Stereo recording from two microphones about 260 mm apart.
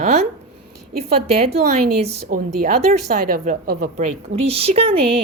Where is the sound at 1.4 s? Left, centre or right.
Right.